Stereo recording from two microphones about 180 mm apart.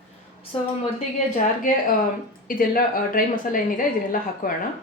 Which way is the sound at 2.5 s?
50° left (ahead or behind).